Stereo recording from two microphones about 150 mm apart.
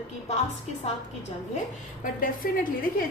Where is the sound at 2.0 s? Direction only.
70° left (ahead or behind).